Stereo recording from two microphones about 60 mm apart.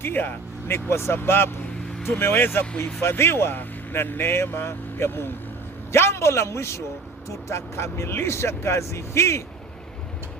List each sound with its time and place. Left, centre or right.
0.0 s speech: left